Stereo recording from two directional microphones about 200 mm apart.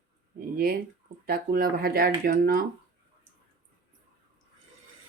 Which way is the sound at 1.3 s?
50° right (ahead or behind).